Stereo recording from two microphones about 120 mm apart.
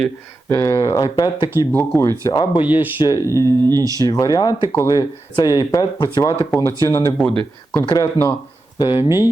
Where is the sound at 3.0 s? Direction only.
35° left (ahead or behind).